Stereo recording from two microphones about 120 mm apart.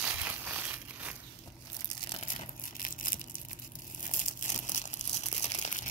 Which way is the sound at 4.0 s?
90° left.